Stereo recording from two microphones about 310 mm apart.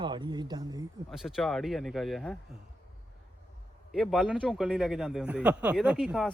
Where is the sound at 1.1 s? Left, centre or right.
Centre.